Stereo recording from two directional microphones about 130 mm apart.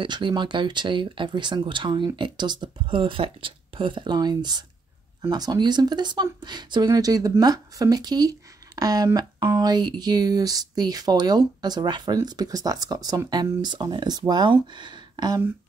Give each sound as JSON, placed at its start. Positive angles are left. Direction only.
{"t": 0.0, "sound": "speech", "side_deg": -35}